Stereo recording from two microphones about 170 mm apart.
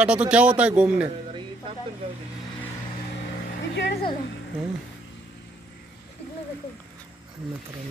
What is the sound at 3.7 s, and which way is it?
Speech, 90° left.